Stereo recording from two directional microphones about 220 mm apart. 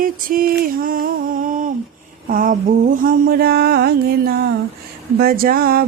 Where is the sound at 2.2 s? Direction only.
40° right (ahead or behind).